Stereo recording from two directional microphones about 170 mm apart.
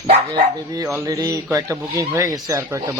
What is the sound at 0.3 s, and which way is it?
Speech, 20° right (ahead or behind).